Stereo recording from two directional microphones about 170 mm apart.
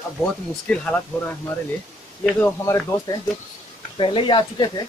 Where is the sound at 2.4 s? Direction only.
20° left (ahead or behind).